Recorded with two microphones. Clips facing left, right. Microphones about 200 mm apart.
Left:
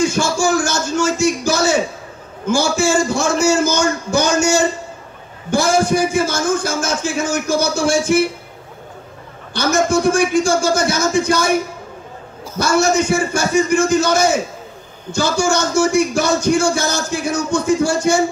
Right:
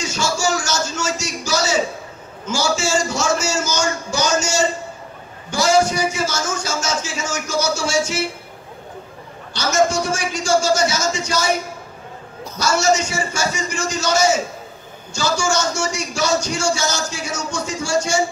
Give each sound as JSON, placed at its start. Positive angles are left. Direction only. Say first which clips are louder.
{"t": 0.0, "sound": "a sound", "louder": "left 6 dB", "side_deg": 55}
{"t": 2.4, "sound": "a man's voice", "louder": "left 5 dB", "side_deg": 55}
{"t": 9.5, "sound": "a man's voice", "louder": "left 2 dB", "side_deg": 55}
{"t": 12.5, "sound": "a man's voice", "louder": "left 3 dB", "side_deg": 55}